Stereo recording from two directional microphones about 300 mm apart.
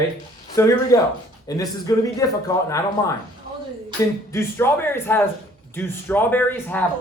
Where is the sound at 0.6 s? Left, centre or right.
Centre.